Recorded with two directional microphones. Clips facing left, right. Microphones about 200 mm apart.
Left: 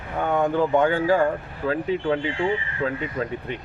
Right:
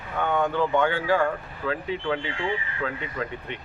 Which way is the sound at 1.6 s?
25° left (ahead or behind).